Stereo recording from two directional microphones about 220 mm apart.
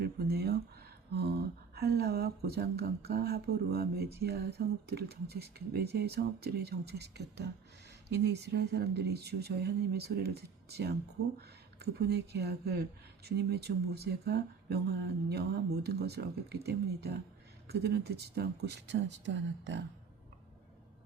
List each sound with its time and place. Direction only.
0.0 s speech: 45° right (ahead or behind)